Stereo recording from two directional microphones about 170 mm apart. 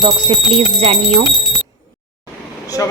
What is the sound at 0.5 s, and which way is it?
Speech, 35° right (ahead or behind).